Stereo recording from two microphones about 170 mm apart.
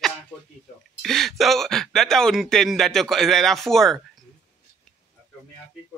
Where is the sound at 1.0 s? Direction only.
Centre (ahead or behind).